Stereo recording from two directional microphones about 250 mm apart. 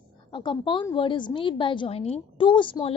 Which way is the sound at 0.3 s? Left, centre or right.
Centre.